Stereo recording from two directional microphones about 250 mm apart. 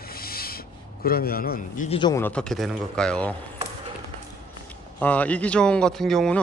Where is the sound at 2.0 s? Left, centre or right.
Centre.